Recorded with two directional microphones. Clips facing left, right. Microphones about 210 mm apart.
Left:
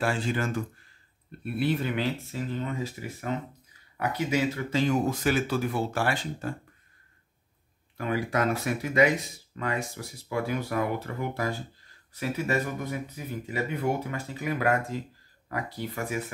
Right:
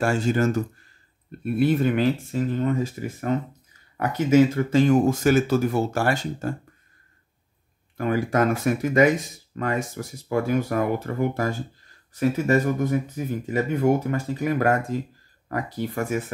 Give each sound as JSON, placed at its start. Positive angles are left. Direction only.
{"t": 0.0, "sound": "speech", "side_deg": -45}
{"t": 8.0, "sound": "speech", "side_deg": -45}